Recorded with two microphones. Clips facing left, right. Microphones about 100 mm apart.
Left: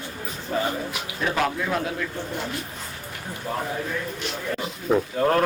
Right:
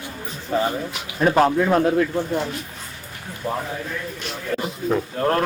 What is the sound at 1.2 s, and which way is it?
Speech, 40° right (ahead or behind).